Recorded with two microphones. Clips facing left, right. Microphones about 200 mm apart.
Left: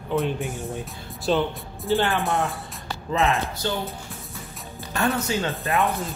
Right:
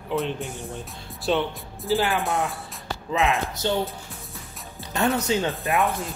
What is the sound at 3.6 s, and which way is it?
Speech, 25° right (ahead or behind).